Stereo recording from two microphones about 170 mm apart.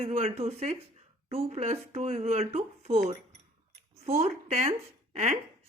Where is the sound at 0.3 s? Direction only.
40° right (ahead or behind).